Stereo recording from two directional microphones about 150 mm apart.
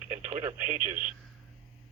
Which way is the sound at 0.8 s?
10° right (ahead or behind).